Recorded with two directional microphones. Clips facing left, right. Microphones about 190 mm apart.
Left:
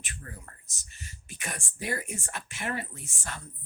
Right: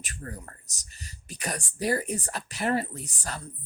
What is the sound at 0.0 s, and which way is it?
Speech, 40° right (ahead or behind).